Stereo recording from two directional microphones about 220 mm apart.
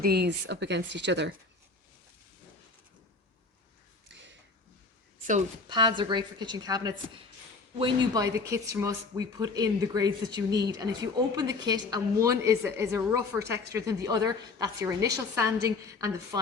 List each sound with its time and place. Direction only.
0.0 s speech: 45° right (ahead or behind)
4.1 s a sound: 55° right (ahead or behind)
5.6 s a woman's voice: 20° right (ahead or behind)